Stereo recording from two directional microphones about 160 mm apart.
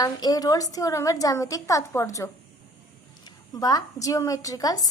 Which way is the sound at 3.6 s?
25° left (ahead or behind).